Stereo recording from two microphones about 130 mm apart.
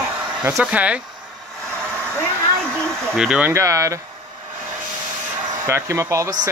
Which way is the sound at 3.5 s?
25° right (ahead or behind).